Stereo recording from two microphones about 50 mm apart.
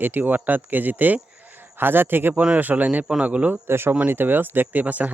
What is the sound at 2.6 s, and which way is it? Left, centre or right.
Speech, right.